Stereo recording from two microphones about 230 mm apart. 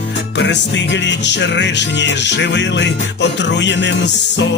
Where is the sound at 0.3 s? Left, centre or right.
Left.